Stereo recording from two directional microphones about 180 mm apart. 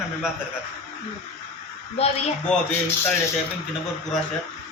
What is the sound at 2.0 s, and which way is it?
Speech, 35° left (ahead or behind).